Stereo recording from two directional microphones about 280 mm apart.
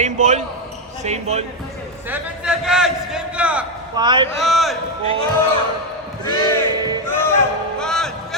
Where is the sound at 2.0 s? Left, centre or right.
Centre.